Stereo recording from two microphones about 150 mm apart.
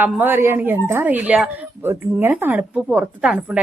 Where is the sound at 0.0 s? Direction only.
15° right (ahead or behind).